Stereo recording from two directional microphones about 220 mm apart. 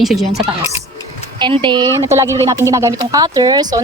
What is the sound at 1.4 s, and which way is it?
Speech, 20° right (ahead or behind).